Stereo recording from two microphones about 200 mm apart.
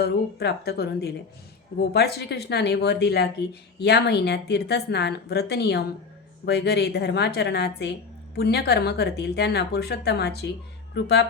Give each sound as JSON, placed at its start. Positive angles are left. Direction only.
{"t": 0.0, "sound": "speech", "side_deg": 55}